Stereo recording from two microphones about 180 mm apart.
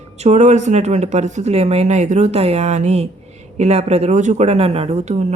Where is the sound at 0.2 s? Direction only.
40° right (ahead or behind).